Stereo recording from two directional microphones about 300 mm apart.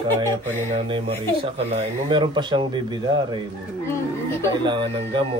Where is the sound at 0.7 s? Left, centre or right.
Centre.